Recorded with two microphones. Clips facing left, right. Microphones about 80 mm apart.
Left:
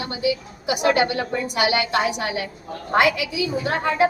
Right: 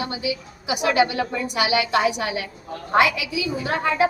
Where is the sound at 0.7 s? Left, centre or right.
Left.